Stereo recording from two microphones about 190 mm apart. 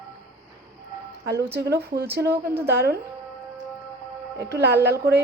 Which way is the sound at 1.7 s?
55° right (ahead or behind).